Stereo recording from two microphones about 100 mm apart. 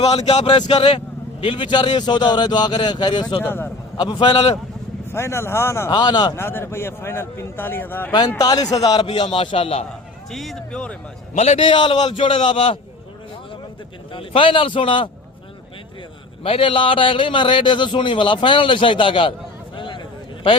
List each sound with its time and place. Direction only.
0.7 s speech: 70° left (ahead or behind); by 3.4 s 50° left (ahead or behind)
3.4 s a man's voice: 20° left (ahead or behind)
3.9 s speech: 50° left (ahead or behind)
5.1 s a man's voice: 25° left (ahead or behind)
5.9 s speech: 45° left (ahead or behind)
6.3 s a man's voice: 25° left (ahead or behind)
8.4 s a man's voice: 40° left (ahead or behind)
9.0 s a man's voice: 60° left (ahead or behind)
10.3 s speech: centre (ahead or behind)
11.3 s a man's voice: 90° left
11.7 s a man's voice: 55° left (ahead or behind)
14.1 s a man's voice: 55° left (ahead or behind)
16.4 s a man's voice: 65° left (ahead or behind)
19.7 s a sound: 55° left (ahead or behind)